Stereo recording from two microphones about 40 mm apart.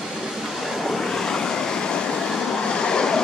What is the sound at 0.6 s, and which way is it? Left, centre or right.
Train, centre.